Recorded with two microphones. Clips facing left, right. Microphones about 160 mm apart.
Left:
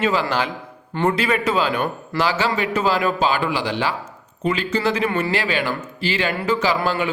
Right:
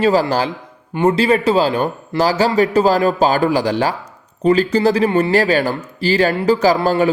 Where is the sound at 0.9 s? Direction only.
20° right (ahead or behind).